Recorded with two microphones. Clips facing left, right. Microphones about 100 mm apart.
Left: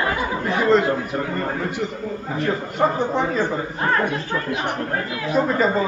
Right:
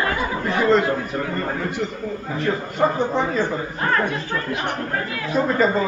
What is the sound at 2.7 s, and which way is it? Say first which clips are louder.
Speech: even; 5° left (ahead or behind).